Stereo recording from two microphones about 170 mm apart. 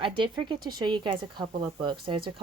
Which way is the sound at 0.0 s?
30° right (ahead or behind).